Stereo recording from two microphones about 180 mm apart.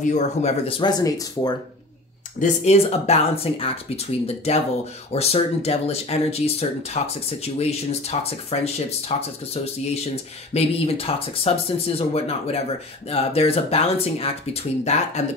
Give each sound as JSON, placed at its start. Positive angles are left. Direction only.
{"t": 0.0, "sound": "speech", "side_deg": 40}
{"t": 2.4, "sound": "speech", "side_deg": 35}
{"t": 5.1, "sound": "speech", "side_deg": 35}